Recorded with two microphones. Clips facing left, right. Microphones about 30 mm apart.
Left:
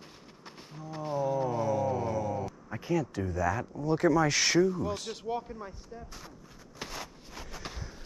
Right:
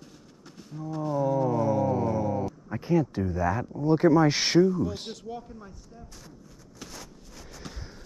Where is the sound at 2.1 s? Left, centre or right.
Right.